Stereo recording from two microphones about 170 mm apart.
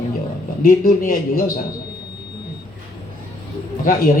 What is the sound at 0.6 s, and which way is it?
Speech, 60° left (ahead or behind).